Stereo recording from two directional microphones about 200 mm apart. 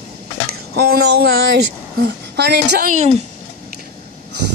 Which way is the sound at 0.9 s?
55° right (ahead or behind).